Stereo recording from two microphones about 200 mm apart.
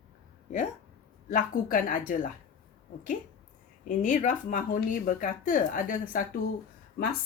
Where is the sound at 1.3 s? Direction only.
45° left (ahead or behind).